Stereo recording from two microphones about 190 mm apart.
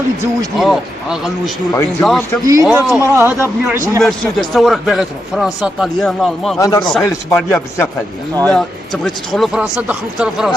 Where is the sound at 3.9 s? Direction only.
Centre (ahead or behind).